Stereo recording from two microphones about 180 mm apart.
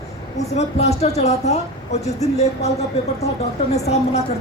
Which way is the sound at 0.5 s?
35° left (ahead or behind).